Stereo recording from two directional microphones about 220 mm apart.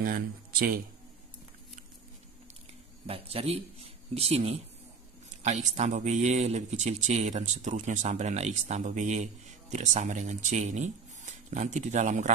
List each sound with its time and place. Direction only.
0.0 s speech: 40° right (ahead or behind)
3.1 s speech: 25° right (ahead or behind)